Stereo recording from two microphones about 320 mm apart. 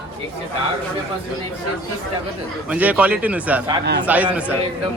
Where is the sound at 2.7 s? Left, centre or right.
Centre.